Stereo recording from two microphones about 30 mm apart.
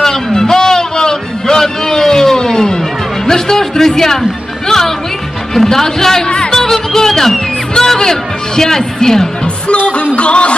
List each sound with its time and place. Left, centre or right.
0.0 s music: centre
5.5 s speech: centre
6.2 s speech: left
6.5 s speech: centre
10.1 s music: left